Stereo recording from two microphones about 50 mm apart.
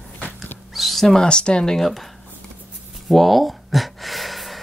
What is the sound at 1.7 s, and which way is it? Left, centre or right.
Speech, centre.